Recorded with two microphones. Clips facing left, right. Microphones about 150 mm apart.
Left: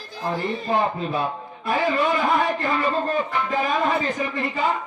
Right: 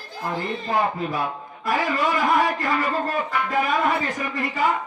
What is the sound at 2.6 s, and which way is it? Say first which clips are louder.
A man's voice: left 1 dB; 25° left (ahead or behind).